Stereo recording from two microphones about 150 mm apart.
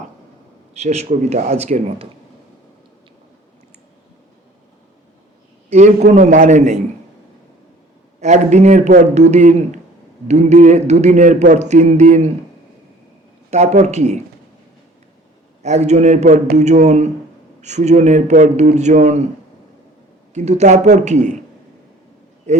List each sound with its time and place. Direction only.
0.7 s speech: 45° right (ahead or behind)
6.1 s speech: 50° right (ahead or behind)
8.2 s speech: 50° right (ahead or behind)
13.5 s speech: 50° right (ahead or behind)
15.6 s speech: 50° right (ahead or behind)
20.3 s speech: 50° right (ahead or behind)